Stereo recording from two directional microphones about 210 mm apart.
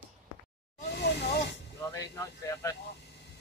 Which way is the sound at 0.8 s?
50° left (ahead or behind).